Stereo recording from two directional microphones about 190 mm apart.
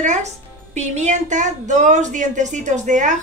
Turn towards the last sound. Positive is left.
turn(degrees=-40)  # may be behind; listen again after turning